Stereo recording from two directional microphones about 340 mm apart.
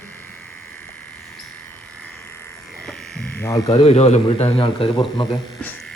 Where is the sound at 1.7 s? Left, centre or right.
Centre.